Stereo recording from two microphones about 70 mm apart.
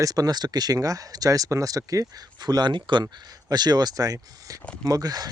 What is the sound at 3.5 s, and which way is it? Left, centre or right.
Speech, right.